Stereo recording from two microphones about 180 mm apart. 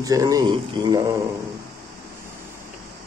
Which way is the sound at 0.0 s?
20° right (ahead or behind).